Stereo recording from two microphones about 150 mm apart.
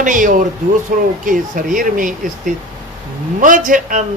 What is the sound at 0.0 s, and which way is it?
A man's voice, 60° right (ahead or behind).